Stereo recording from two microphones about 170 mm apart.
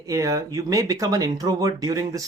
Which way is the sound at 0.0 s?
20° right (ahead or behind).